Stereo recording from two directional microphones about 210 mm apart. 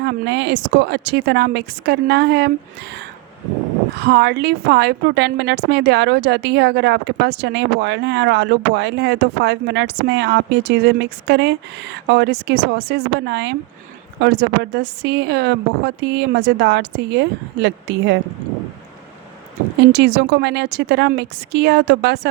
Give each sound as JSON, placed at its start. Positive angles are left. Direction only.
{"t": 0.0, "sound": "a woman's voice", "side_deg": -55}
{"t": 4.0, "sound": "a woman's voice", "side_deg": -55}
{"t": 19.8, "sound": "a woman's voice", "side_deg": -55}